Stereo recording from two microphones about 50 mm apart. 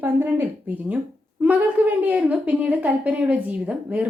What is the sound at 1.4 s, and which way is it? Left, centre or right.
A woman's voice, right.